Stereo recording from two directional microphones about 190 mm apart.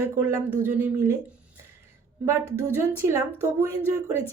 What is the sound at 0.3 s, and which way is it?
Speech, 10° right (ahead or behind).